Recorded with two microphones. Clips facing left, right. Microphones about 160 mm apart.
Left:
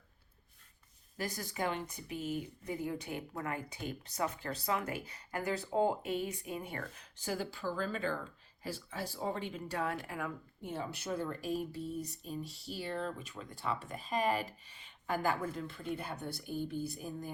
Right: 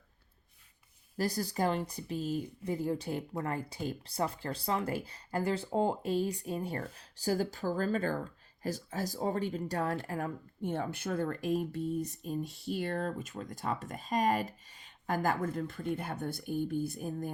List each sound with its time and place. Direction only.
1.1 s speech: 35° right (ahead or behind); by 17.3 s 50° right (ahead or behind)